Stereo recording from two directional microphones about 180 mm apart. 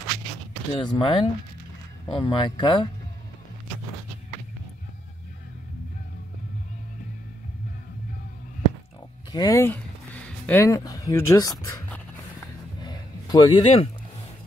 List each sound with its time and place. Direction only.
0.7 s speech: 25° left (ahead or behind)
9.3 s speech: 20° left (ahead or behind)
12.8 s a sound: 25° left (ahead or behind)